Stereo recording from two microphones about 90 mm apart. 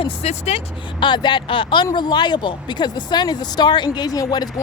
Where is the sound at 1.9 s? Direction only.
55° left (ahead or behind).